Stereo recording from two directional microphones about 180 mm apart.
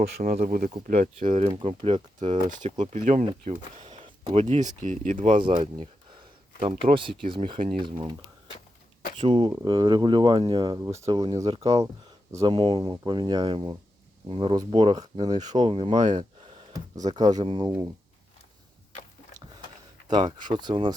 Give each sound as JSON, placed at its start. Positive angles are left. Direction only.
{"t": 0.2, "sound": "speech", "side_deg": -55}
{"t": 3.8, "sound": "a sound", "side_deg": -30}
{"t": 4.8, "sound": "speech", "side_deg": -45}
{"t": 5.4, "sound": "speech", "side_deg": -30}
{"t": 9.2, "sound": "speech", "side_deg": -30}
{"t": 20.1, "sound": "speech", "side_deg": -25}